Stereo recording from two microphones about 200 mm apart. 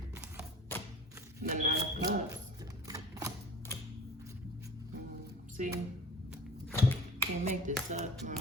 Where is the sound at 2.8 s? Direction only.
15° right (ahead or behind).